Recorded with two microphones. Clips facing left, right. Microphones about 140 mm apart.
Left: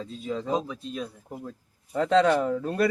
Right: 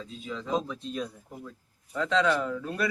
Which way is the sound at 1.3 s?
35° left (ahead or behind).